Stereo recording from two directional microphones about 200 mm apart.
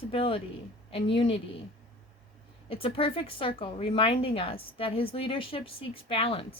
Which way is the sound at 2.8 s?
25° left (ahead or behind).